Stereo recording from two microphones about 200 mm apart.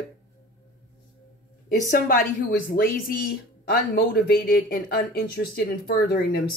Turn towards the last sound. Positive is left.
turn(degrees=50)  # may be behind; listen again after turning